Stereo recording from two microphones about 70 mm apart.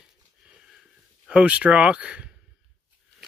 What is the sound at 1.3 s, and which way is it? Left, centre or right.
Speech, centre.